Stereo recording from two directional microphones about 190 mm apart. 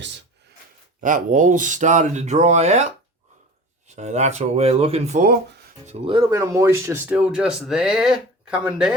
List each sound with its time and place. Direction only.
1.0 s speech: 40° right (ahead or behind)
6.3 s speech: 15° right (ahead or behind)